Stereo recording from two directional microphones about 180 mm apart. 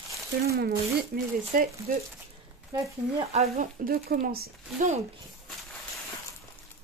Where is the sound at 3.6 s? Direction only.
50° right (ahead or behind).